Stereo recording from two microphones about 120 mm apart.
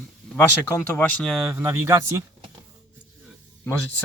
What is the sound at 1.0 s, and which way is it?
Speech, 5° left (ahead or behind).